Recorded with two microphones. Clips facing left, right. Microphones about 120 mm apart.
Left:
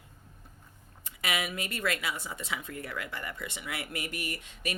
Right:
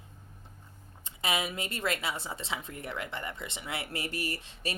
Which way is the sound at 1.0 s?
25° right (ahead or behind).